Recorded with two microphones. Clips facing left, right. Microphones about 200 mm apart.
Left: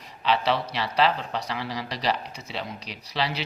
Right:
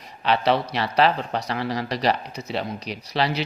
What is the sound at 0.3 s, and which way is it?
Speech, 50° right (ahead or behind).